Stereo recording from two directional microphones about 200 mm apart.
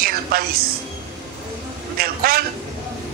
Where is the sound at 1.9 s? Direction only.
50° right (ahead or behind).